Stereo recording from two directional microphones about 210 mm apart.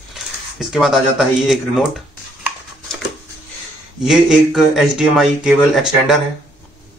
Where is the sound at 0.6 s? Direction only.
Centre (ahead or behind).